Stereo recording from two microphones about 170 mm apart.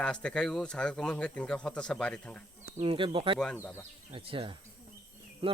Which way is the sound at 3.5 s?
15° left (ahead or behind).